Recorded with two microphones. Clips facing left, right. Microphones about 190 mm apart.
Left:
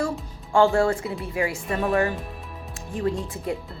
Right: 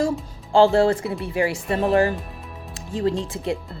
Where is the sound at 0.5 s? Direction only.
30° right (ahead or behind).